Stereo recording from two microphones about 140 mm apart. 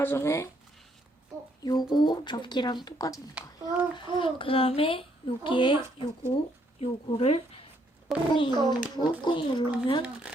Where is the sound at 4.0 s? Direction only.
35° left (ahead or behind).